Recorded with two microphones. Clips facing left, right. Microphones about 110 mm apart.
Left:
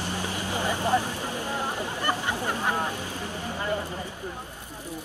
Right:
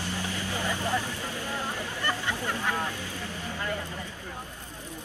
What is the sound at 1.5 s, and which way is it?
Hubbub, 20° left (ahead or behind).